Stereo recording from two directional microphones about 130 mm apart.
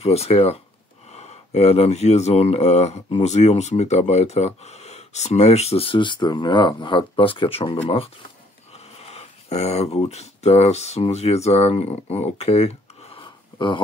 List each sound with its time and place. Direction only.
0.0 s speech: 50° left (ahead or behind)